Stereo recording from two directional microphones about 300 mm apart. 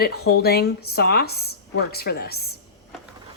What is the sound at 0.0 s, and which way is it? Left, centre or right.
A woman's voice, left.